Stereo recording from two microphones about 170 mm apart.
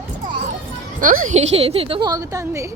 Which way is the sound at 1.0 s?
50° right (ahead or behind).